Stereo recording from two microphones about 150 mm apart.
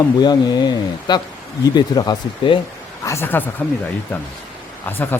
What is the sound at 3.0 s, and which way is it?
Speech, 15° left (ahead or behind).